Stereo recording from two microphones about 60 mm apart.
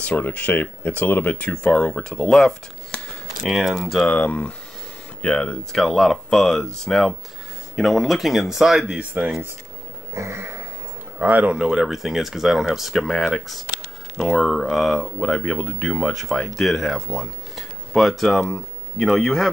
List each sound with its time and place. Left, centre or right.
0.0 s speech: left
3.4 s speech: centre
4.1 s speech: left
5.8 s speech: centre
10.1 s a sound: right
11.1 s speech: right
11.5 s speech: centre